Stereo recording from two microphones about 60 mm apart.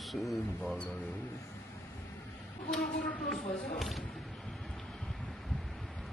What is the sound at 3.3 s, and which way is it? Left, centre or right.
Speech, centre.